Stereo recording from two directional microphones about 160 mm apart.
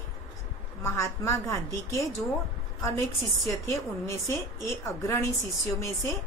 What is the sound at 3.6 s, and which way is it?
A woman's voice, 15° left (ahead or behind).